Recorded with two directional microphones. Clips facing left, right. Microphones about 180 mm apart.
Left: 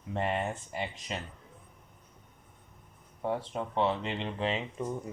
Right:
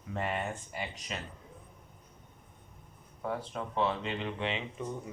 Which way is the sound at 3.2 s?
30° left (ahead or behind).